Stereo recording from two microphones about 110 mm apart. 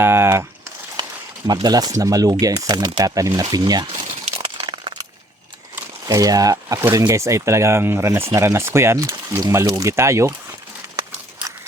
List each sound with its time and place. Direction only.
0.0 s speech: 20° right (ahead or behind)
1.6 s speech: 40° right (ahead or behind)
4.4 s a sound: 55° right (ahead or behind)
6.1 s speech: 35° right (ahead or behind)